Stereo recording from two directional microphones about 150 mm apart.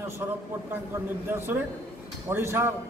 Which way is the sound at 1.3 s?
15° right (ahead or behind).